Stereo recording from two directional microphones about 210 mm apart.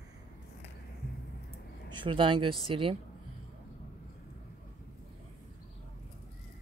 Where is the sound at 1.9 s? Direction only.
20° right (ahead or behind).